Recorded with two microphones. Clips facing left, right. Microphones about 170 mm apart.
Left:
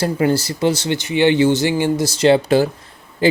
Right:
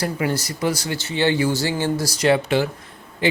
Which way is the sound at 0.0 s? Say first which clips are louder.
Left 6 dB; 30° left (ahead or behind).